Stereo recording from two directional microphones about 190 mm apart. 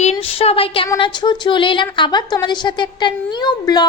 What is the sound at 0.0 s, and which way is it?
A woman's voice, 30° left (ahead or behind).